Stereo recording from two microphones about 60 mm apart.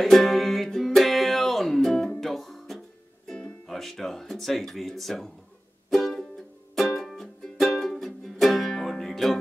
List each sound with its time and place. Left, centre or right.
0.0 s music: centre
3.3 s music: centre
3.7 s a sound: centre
5.9 s music: centre